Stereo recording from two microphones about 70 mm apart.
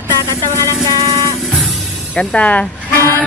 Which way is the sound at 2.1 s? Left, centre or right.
Centre.